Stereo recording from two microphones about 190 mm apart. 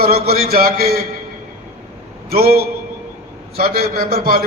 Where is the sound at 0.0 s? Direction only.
55° right (ahead or behind).